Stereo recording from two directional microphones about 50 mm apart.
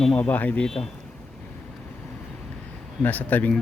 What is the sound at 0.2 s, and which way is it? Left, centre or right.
Speech, left.